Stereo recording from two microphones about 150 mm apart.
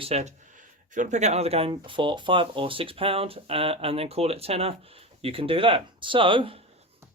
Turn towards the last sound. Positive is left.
turn(degrees=-35)  # may be behind; listen again after turning